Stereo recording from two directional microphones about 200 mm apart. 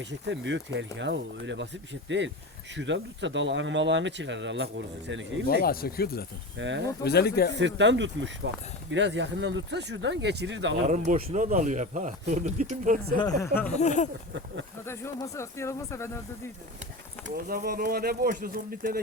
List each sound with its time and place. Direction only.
0.0 s speech: 65° right (ahead or behind)
5.6 s speech: 50° left (ahead or behind)
6.6 s speech: 65° right (ahead or behind)
7.0 s speech: 55° left (ahead or behind)
7.6 s speech: 65° right (ahead or behind)
10.8 s speech: 35° right (ahead or behind)
13.4 s speech: 10° left (ahead or behind)
13.7 s speech: 35° left (ahead or behind)
14.8 s speech: 15° left (ahead or behind)
17.2 s speech: 50° right (ahead or behind)